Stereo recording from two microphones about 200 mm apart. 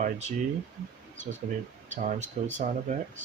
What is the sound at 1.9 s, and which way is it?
Speech, 40° right (ahead or behind).